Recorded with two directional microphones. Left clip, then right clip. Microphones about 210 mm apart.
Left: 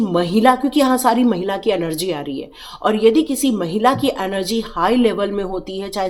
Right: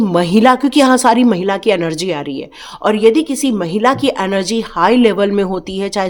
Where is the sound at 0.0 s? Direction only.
30° right (ahead or behind).